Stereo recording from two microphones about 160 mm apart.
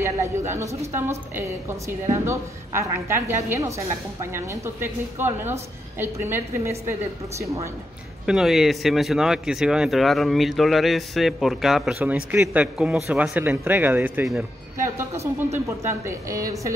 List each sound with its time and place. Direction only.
0.5 s a woman's voice: 15° right (ahead or behind)
8.3 s a woman's voice: 5° right (ahead or behind); by 16.4 s 20° right (ahead or behind)